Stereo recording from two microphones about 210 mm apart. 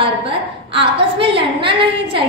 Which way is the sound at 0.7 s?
25° right (ahead or behind).